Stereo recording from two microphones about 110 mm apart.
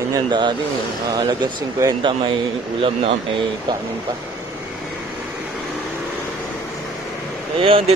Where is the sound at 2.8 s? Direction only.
60° right (ahead or behind).